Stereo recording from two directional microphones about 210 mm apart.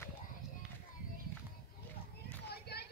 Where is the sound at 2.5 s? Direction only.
50° left (ahead or behind).